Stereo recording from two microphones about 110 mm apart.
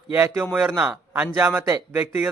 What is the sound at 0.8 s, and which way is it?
A man's voice, 10° right (ahead or behind).